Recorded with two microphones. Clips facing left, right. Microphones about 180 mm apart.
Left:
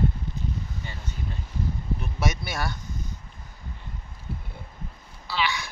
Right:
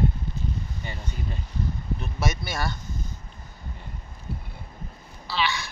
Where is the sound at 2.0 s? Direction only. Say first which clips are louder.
Right 1 dB; 15° left (ahead or behind).